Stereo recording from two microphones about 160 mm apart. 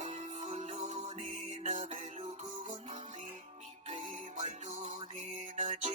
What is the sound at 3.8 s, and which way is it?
Music, 30° right (ahead or behind).